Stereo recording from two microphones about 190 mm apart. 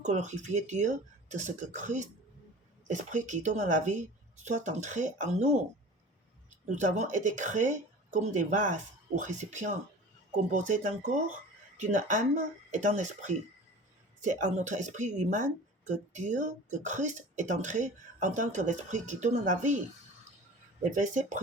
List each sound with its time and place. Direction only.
0.0 s speech: 40° right (ahead or behind)
6.5 s speech: 40° right (ahead or behind)
20.9 s speech: 40° right (ahead or behind)